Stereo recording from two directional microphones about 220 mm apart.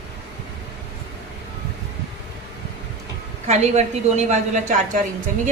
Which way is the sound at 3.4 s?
30° right (ahead or behind).